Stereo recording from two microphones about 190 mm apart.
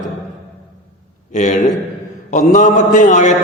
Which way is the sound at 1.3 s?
40° left (ahead or behind).